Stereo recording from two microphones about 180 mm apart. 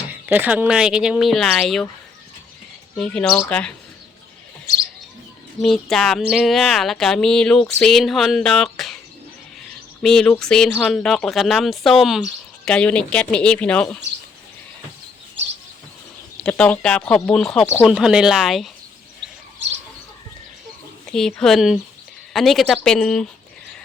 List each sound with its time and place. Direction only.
0.1 s speech: 10° right (ahead or behind)
2.9 s speech: 5° left (ahead or behind)
5.6 s speech: centre (ahead or behind)
10.0 s speech: 5° left (ahead or behind)
16.4 s speech: 5° left (ahead or behind)
21.1 s speech: 5° left (ahead or behind)